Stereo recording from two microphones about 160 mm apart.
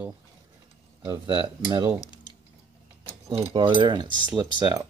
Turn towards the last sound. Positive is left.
turn(degrees=-20)  # may be behind; listen again after turning